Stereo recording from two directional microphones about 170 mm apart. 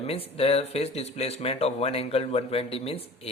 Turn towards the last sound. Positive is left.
turn(degrees=35)  # may be behind; listen again after turning